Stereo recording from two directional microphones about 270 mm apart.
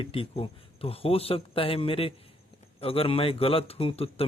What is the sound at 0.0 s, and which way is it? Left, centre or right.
Speech, left.